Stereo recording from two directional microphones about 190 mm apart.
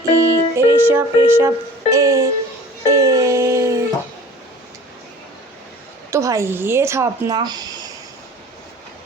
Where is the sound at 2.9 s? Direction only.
15° right (ahead or behind).